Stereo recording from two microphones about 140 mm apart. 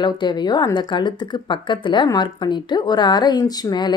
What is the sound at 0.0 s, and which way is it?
Speech, 30° left (ahead or behind).